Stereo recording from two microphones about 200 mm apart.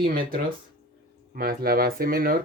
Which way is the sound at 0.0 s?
45° right (ahead or behind).